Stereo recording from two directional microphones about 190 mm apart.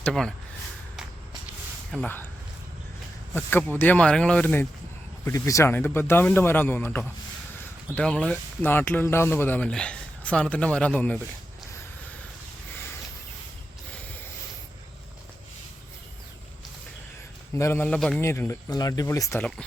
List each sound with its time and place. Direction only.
0.0 s speech: 5° left (ahead or behind)
1.9 s speech: 5° left (ahead or behind)
3.3 s speech: 10° left (ahead or behind)
17.5 s speech: 15° left (ahead or behind)
19.4 s speech: 5° left (ahead or behind)